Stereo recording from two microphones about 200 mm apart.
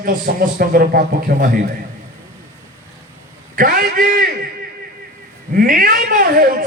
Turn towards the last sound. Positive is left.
turn(degrees=-45)  # may be behind; listen again after turning